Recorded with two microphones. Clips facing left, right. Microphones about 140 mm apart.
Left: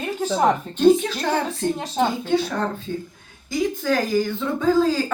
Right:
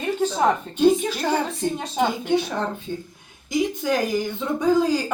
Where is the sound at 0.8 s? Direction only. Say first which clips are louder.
Left 2 dB; 10° right (ahead or behind).